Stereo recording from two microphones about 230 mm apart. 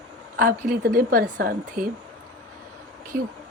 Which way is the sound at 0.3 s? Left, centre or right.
Right.